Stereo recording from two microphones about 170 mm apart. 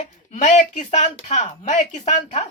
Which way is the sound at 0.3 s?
45° left (ahead or behind).